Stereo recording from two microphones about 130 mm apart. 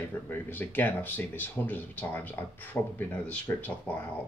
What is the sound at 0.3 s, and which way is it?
Speech, 15° left (ahead or behind).